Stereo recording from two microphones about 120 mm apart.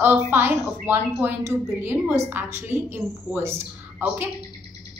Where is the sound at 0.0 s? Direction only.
20° right (ahead or behind).